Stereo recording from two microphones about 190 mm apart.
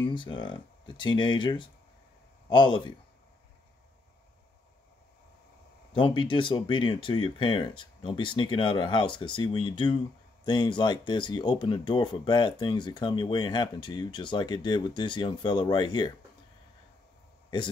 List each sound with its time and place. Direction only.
0.0 s speech: 25° left (ahead or behind)
5.9 s speech: 25° left (ahead or behind)